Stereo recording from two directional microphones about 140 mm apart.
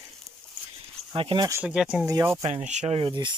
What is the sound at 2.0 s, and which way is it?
Speech, 20° right (ahead or behind).